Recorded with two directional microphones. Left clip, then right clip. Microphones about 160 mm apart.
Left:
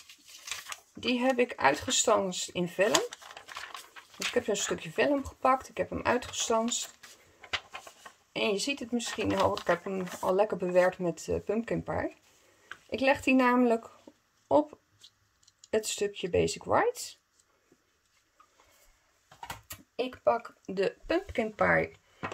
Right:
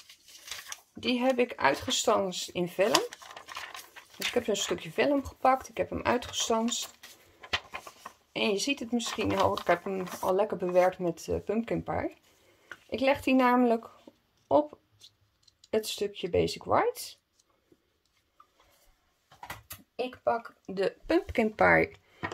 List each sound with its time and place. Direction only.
0.9 s speech: 5° left (ahead or behind)
2.9 s crumpling: 5° right (ahead or behind)
3.9 s speech: centre (ahead or behind)
7.4 s a sound: 15° right (ahead or behind)
8.3 s speech: centre (ahead or behind)
10.3 s speech: 5° left (ahead or behind)
12.6 s a sound: 5° left (ahead or behind)
15.7 s speech: 10° left (ahead or behind)
19.2 s a sound: 50° left (ahead or behind)
21.3 s speech: 25° right (ahead or behind)